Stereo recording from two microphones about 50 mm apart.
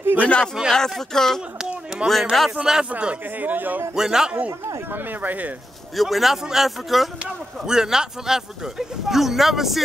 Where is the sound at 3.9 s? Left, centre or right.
Centre.